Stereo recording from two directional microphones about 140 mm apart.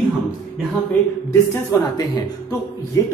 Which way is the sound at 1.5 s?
25° left (ahead or behind).